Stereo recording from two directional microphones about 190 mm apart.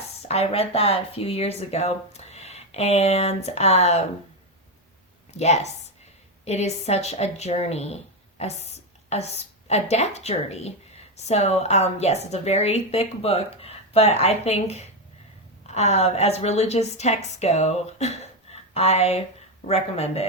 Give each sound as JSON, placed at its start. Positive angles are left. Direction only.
{"t": 0.3, "sound": "speech", "side_deg": 30}
{"t": 5.4, "sound": "speech", "side_deg": 35}